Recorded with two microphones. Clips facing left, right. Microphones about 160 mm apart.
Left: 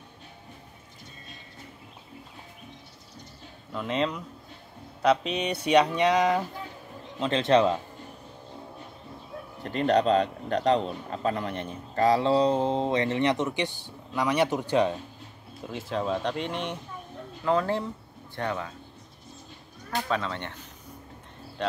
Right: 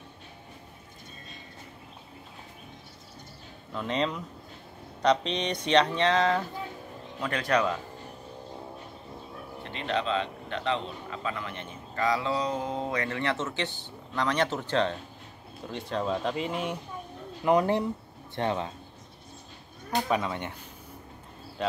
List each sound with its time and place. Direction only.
3.7 s speech: centre (ahead or behind)
7.2 s a man's voice: 25° left (ahead or behind)
9.6 s a man's voice: 45° left (ahead or behind); by 15.0 s 10° left (ahead or behind)
15.7 s speech: centre (ahead or behind)
17.5 s speech: 20° right (ahead or behind)
19.9 s speech: 15° right (ahead or behind)
21.6 s cricket: 5° right (ahead or behind)